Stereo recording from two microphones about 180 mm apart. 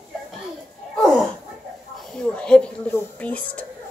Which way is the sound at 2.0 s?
5° left (ahead or behind).